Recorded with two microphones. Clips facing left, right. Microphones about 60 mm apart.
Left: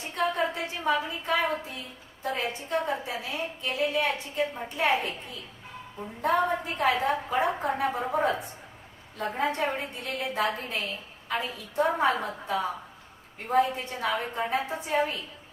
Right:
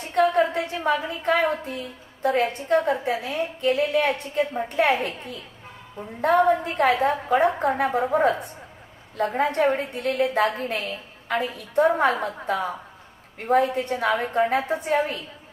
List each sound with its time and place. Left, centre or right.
0.1 s a woman's voice: right